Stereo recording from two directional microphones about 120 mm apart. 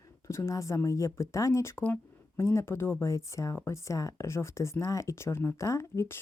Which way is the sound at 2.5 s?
20° left (ahead or behind).